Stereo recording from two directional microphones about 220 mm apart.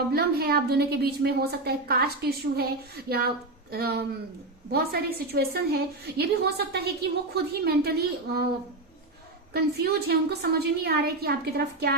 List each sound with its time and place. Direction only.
0.1 s a woman's voice: 45° right (ahead or behind)
9.5 s a woman's voice: 45° right (ahead or behind)